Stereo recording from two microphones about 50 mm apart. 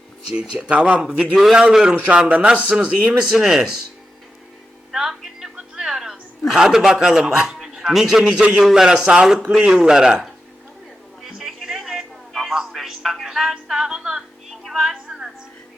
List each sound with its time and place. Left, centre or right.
0.5 s a man's voice: centre
4.9 s a sound: centre
5.5 s music: centre
6.5 s a man's voice: centre
11.2 s music: centre
14.5 s music: centre